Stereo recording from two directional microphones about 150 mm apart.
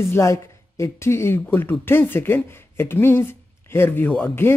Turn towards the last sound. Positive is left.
turn(degrees=15)  # may be behind; listen again after turning